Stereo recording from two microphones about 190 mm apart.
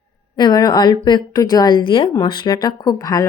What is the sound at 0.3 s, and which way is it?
A woman's voice, 20° left (ahead or behind).